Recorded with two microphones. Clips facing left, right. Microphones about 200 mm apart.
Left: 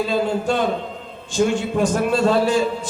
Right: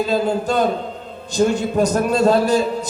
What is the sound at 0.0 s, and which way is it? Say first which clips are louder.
Speech: right 1 dB; 40° right (ahead or behind).